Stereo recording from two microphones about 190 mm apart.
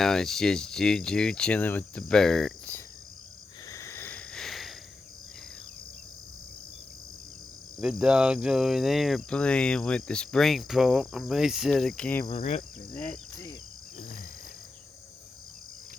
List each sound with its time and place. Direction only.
0.0 s cricket: centre (ahead or behind)
3.7 s a sound: 15° left (ahead or behind)
7.8 s cricket: 5° right (ahead or behind)
12.2 s cricket: 30° left (ahead or behind)